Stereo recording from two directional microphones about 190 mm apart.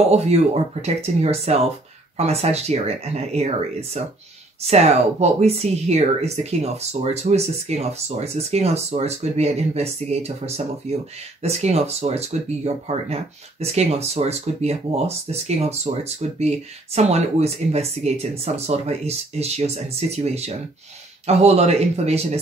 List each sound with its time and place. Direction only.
0.8 s speech: 35° right (ahead or behind)